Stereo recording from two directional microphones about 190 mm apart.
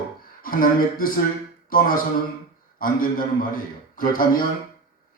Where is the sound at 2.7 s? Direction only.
45° left (ahead or behind).